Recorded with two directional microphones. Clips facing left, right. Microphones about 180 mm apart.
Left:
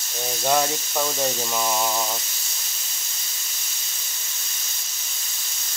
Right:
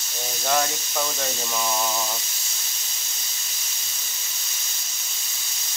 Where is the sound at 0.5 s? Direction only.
10° left (ahead or behind).